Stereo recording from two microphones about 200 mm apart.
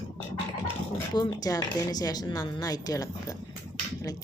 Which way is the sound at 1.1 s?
20° left (ahead or behind).